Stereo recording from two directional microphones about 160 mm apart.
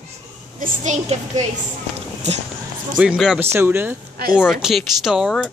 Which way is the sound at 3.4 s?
15° right (ahead or behind).